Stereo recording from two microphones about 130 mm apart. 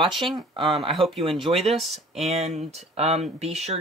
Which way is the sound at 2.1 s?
55° right (ahead or behind).